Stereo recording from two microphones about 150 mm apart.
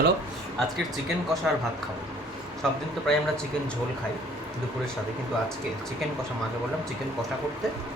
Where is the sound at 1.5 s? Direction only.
Centre (ahead or behind).